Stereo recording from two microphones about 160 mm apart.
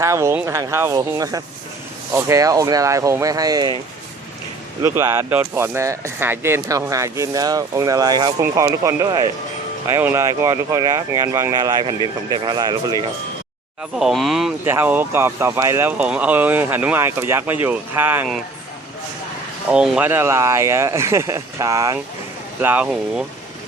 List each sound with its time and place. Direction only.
0.0 s speech: 20° right (ahead or behind)
4.8 s speech: 20° right (ahead or behind)
14.0 s speech: centre (ahead or behind)
14.6 s speech: 15° right (ahead or behind)
19.7 s speech: 5° right (ahead or behind)
22.6 s speech: 10° right (ahead or behind)